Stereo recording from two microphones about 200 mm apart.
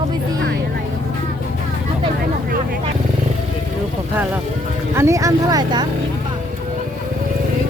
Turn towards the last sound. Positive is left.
turn(degrees=-20)  # may be behind; listen again after turning